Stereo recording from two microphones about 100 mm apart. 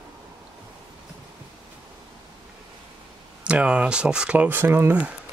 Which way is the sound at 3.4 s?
10° right (ahead or behind).